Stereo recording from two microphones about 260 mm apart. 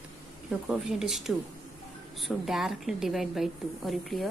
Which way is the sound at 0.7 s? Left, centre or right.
Centre.